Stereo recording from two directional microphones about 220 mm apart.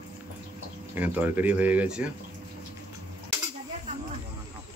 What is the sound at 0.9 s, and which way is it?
Speech, 10° right (ahead or behind).